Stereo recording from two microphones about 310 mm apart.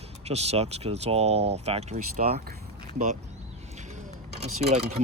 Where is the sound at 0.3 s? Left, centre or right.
Centre.